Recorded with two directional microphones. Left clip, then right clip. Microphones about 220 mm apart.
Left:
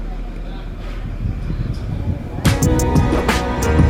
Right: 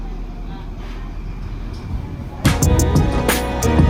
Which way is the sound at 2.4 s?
Centre (ahead or behind).